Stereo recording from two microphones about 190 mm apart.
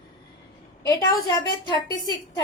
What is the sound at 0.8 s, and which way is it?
A woman's voice, 20° left (ahead or behind).